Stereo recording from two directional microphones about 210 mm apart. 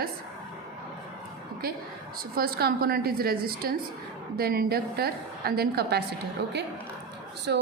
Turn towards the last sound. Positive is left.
turn(degrees=-55)  # may be behind; listen again after turning